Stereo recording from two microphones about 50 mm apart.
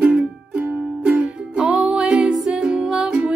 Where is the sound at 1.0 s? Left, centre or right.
Right.